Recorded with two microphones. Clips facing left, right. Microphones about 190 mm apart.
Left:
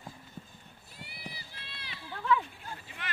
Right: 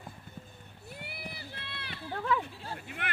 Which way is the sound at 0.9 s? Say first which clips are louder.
Right 2 dB; 60° right (ahead or behind).